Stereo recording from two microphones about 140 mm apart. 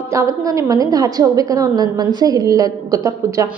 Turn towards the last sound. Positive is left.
turn(degrees=-25)  # may be behind; listen again after turning